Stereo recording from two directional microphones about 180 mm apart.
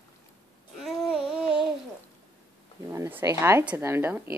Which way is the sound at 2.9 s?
15° right (ahead or behind).